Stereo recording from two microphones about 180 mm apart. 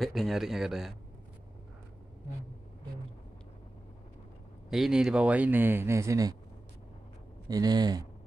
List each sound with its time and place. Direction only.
0.0 s speech: centre (ahead or behind)
4.6 s speech: centre (ahead or behind); by 6.3 s 20° right (ahead or behind)
7.4 s speech: 20° right (ahead or behind)